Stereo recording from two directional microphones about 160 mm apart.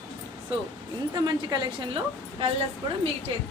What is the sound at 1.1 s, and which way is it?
Speech, 25° right (ahead or behind).